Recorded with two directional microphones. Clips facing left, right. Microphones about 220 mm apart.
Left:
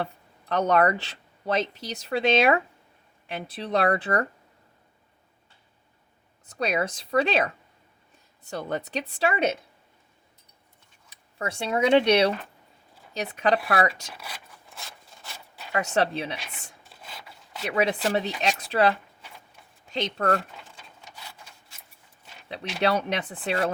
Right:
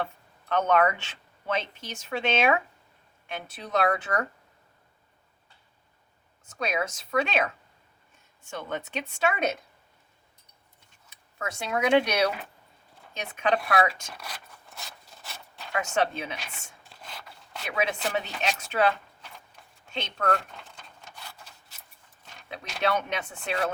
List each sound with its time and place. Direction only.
0.0 s speech: 35° left (ahead or behind)
6.4 s speech: 35° left (ahead or behind)
11.3 s speech: 30° left (ahead or behind)
14.1 s a sound: 5° left (ahead or behind)
15.9 s speech: 35° left (ahead or behind)
16.9 s filing: 5° left (ahead or behind)
17.7 s speech: 35° left (ahead or behind)
20.5 s a sound: 5° left (ahead or behind)
22.8 s speech: 35° left (ahead or behind)